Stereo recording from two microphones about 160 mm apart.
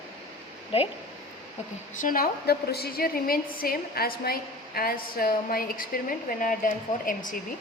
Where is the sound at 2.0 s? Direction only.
65° left (ahead or behind).